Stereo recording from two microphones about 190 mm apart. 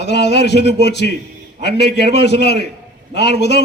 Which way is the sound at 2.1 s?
65° left (ahead or behind).